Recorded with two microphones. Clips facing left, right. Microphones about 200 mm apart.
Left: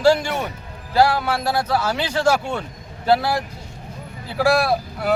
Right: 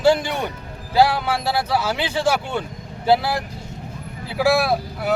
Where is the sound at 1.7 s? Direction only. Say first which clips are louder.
Even; 5° right (ahead or behind).